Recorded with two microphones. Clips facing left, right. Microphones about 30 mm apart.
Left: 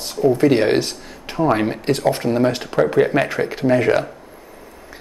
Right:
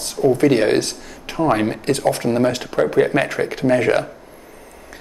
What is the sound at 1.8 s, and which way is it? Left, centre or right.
Speech, centre.